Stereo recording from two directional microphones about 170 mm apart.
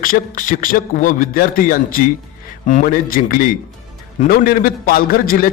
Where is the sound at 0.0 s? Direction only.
55° left (ahead or behind).